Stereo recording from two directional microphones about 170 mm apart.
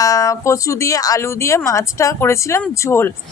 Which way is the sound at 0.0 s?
20° left (ahead or behind).